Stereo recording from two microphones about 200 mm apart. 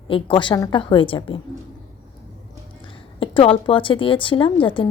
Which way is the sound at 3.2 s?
25° left (ahead or behind).